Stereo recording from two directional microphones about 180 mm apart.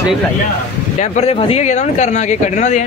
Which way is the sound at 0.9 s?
35° left (ahead or behind).